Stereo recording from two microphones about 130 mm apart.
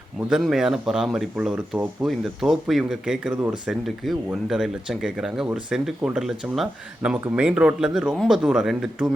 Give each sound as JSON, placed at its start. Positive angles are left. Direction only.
{"t": 0.2, "sound": "speech", "side_deg": -5}